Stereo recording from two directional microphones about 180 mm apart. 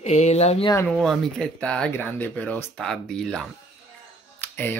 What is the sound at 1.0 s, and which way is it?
Speech, centre (ahead or behind).